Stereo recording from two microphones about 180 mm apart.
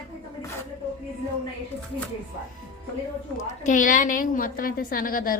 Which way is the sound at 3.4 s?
45° left (ahead or behind).